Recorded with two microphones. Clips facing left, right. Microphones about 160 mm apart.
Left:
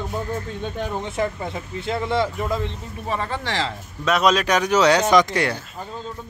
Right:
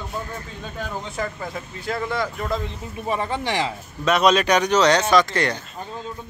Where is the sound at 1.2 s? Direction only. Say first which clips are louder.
Left 4 dB; 25° left (ahead or behind).